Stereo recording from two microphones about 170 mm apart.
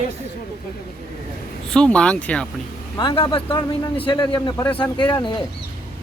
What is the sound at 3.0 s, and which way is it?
A man's voice, 25° left (ahead or behind).